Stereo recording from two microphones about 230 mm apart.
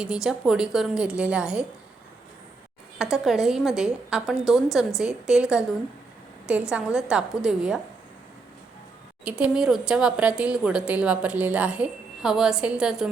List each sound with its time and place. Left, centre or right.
0.0 s a woman's voice: centre
3.0 s a woman's voice: centre
9.2 s a woman's voice: centre